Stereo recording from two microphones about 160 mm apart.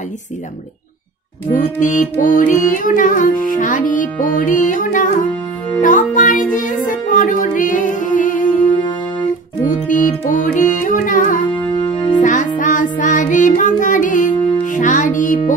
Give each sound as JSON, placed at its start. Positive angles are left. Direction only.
{"t": 1.5, "sound": "music", "side_deg": 55}
{"t": 9.7, "sound": "music", "side_deg": 55}
{"t": 11.7, "sound": "music", "side_deg": 30}
{"t": 12.2, "sound": "music", "side_deg": 50}
{"t": 12.5, "sound": "child singing", "side_deg": 55}